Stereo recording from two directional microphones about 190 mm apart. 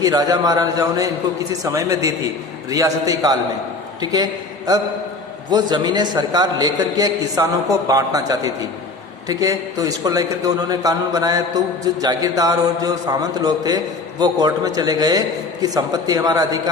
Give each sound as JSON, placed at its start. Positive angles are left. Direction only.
{"t": 0.0, "sound": "a man's voice", "side_deg": -20}